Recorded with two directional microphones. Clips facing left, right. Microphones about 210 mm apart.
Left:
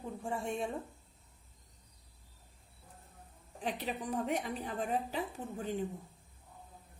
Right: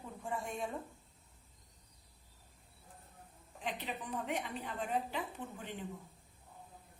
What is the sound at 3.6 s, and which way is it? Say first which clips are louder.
A woman's voice: left 4 dB; 40° left (ahead or behind).